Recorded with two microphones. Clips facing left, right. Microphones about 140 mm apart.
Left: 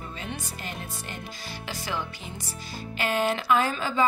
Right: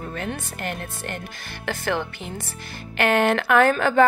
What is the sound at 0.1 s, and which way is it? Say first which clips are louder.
Speech: right 6 dB; 60° right (ahead or behind).